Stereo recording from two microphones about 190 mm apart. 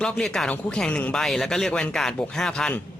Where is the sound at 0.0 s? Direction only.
5° left (ahead or behind).